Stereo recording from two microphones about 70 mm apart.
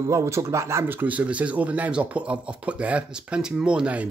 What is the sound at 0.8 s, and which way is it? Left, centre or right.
Speech, right.